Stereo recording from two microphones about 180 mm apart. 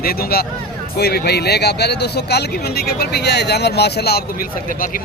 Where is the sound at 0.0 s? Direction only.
60° left (ahead or behind).